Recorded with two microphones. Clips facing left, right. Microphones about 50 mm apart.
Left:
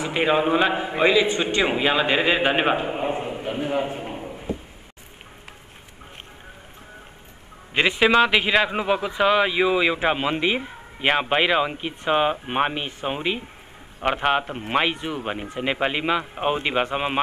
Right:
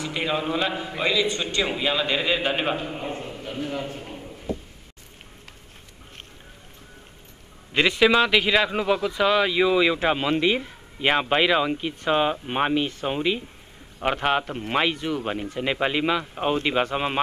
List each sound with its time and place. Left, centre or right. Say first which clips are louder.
0.0 s a man's voice: left 6 dB; left
7.7 s a man's voice: left 1 dB; centre